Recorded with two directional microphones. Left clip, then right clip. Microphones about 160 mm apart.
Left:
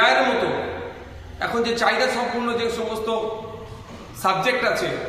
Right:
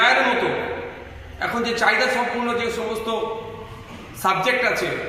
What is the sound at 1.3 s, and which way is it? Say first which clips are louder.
Speech: even; 10° left (ahead or behind).